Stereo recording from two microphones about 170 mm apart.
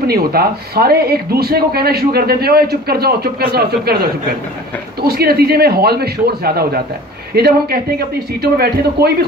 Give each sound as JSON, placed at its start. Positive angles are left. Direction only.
{"t": 0.0, "sound": "speech", "side_deg": -65}